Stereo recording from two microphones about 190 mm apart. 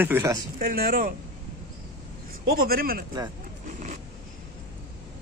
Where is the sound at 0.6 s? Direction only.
50° right (ahead or behind).